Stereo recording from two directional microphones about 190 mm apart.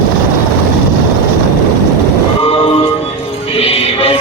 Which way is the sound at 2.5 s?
30° left (ahead or behind).